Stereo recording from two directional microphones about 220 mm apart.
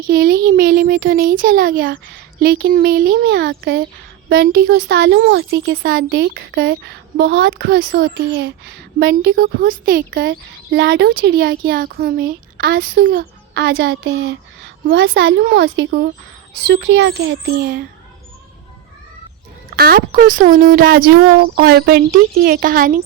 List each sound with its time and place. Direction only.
0.1 s a child's voice: 40° right (ahead or behind)
19.7 s a child's voice: 45° right (ahead or behind)